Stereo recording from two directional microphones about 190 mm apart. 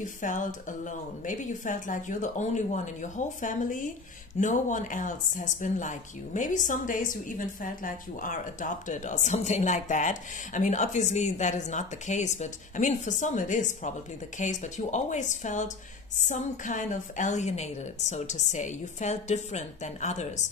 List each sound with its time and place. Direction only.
0.2 s a woman's voice: 45° left (ahead or behind)